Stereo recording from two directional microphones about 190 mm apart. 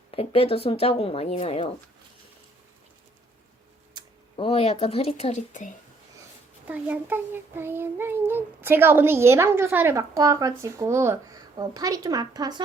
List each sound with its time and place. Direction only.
0.1 s speech: 30° left (ahead or behind)
4.4 s speech: 30° left (ahead or behind)
6.7 s child singing: 10° right (ahead or behind)